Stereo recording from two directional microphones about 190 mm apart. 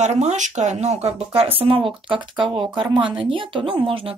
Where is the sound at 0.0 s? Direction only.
35° right (ahead or behind).